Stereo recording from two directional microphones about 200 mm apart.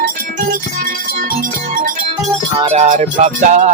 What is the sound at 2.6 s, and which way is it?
Music, 30° right (ahead or behind).